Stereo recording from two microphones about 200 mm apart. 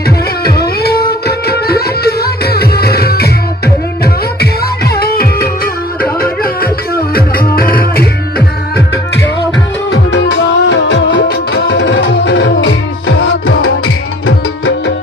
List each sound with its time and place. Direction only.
0.8 s music: 50° left (ahead or behind)
9.9 s music: 65° left (ahead or behind)